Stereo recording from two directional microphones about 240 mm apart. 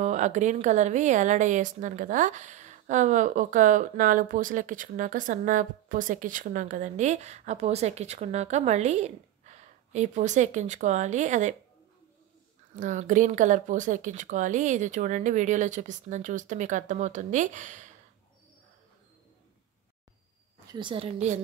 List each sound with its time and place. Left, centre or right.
0.0 s a woman's voice: right
12.7 s a woman's voice: right
20.6 s a woman's voice: centre